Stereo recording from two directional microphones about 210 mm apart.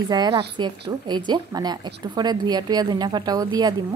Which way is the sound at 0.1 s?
20° right (ahead or behind).